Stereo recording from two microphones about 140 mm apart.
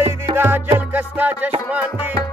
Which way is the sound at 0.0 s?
15° right (ahead or behind).